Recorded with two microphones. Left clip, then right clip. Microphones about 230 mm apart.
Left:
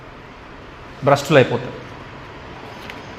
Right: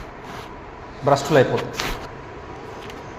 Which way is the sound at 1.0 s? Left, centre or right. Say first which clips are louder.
Left 3 dB; left.